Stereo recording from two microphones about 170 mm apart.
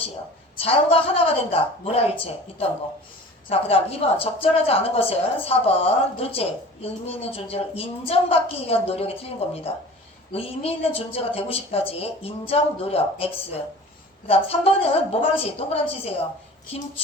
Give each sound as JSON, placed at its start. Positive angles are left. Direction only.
{"t": 0.6, "sound": "a woman's voice", "side_deg": 35}